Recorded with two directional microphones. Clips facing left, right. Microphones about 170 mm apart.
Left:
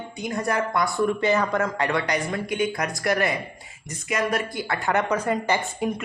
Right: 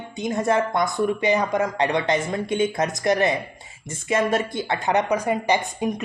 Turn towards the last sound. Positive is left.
turn(degrees=-15)  # may be behind; listen again after turning